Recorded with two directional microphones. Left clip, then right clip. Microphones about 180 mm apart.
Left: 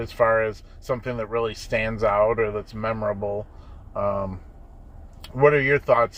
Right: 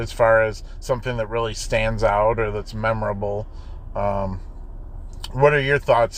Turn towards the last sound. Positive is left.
turn(degrees=-30)  # may be behind; listen again after turning